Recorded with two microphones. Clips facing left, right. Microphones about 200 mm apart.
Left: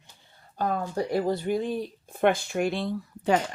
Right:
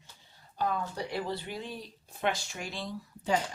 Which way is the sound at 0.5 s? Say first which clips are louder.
Left 5 dB; 50° left (ahead or behind).